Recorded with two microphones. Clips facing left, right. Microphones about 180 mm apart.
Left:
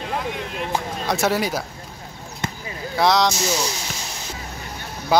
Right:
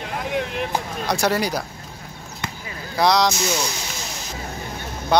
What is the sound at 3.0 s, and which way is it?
Speech, centre (ahead or behind).